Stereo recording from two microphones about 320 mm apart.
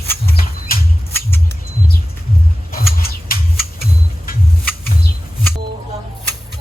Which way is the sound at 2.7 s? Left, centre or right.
Left.